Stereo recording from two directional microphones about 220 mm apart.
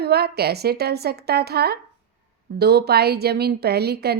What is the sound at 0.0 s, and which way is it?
A woman's voice, 45° right (ahead or behind).